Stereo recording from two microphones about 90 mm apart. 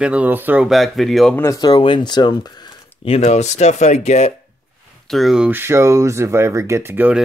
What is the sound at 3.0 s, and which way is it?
Speech, 90° left.